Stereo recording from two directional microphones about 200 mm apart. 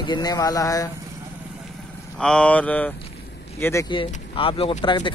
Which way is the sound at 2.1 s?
5° left (ahead or behind).